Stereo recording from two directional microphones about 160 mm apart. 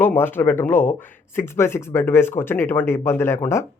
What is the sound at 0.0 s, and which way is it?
A man's voice, 15° left (ahead or behind).